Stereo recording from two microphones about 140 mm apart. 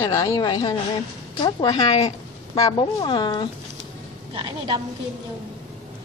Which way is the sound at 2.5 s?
30° left (ahead or behind).